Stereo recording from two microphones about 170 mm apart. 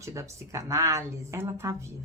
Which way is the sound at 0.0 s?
15° right (ahead or behind).